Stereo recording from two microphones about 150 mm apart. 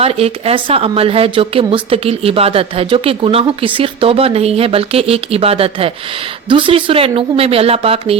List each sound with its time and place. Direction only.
0.0 s speech: 40° right (ahead or behind)